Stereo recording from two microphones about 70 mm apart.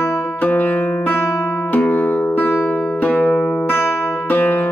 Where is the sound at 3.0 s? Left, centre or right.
Centre.